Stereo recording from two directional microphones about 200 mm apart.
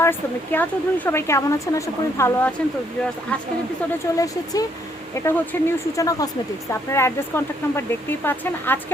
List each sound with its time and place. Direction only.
0.0 s speech: 10° left (ahead or behind)
4.0 s speech: 15° left (ahead or behind)